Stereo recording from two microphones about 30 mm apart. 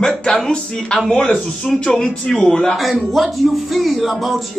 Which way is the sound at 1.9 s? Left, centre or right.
Centre.